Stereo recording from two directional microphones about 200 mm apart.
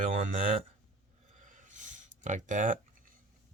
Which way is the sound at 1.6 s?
40° right (ahead or behind).